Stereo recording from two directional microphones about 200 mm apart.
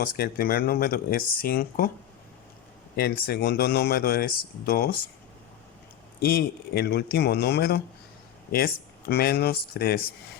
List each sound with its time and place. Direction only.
0.0 s speech: 50° left (ahead or behind)
2.9 s speech: 50° left (ahead or behind)
6.2 s speech: 50° left (ahead or behind)